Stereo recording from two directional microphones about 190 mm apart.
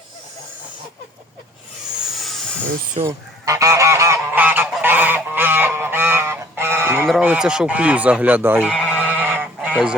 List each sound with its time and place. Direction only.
2.1 s a sound: centre (ahead or behind)
2.6 s speech: 40° right (ahead or behind)
3.1 s goose: 15° right (ahead or behind)
7.1 s speech: 5° right (ahead or behind)
8.8 s goose: 5° right (ahead or behind)